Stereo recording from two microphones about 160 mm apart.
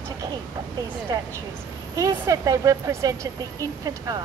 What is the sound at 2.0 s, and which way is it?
A woman's voice, 20° right (ahead or behind).